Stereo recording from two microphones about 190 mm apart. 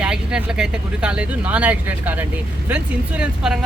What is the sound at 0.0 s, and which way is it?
Speech, 5° right (ahead or behind).